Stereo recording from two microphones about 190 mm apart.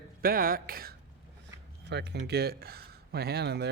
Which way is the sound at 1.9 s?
65° right (ahead or behind).